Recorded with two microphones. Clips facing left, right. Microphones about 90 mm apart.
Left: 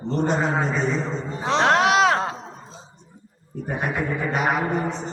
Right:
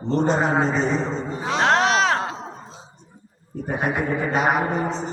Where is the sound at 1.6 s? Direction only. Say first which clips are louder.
Left 1 dB; 15° left (ahead or behind).